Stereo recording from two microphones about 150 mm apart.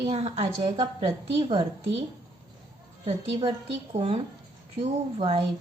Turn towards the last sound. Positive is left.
turn(degrees=-40)  # may be behind; listen again after turning